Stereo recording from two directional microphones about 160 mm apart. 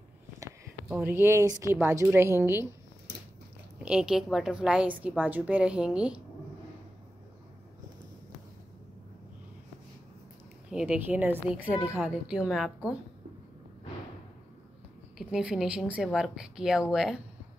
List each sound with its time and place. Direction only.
0.9 s a woman's voice: 10° right (ahead or behind)
3.8 s a woman's voice: 5° right (ahead or behind)
10.7 s a woman's voice: 5° right (ahead or behind)
15.1 s a woman's voice: 5° right (ahead or behind)